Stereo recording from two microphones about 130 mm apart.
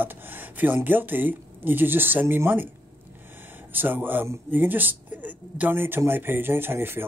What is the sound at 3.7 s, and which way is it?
Speech, 15° right (ahead or behind).